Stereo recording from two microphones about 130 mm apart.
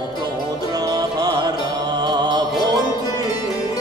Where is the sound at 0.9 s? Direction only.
30° right (ahead or behind).